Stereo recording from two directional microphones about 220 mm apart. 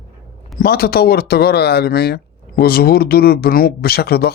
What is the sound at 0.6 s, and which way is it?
Speech, 45° left (ahead or behind).